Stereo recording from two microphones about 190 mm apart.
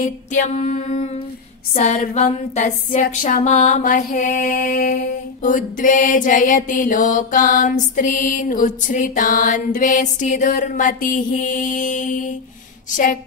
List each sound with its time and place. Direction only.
0.0 s music: 40° left (ahead or behind)
1.7 s mantra: 40° left (ahead or behind)